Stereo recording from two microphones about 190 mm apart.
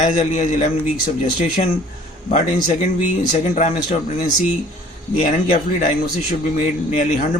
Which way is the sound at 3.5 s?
40° left (ahead or behind).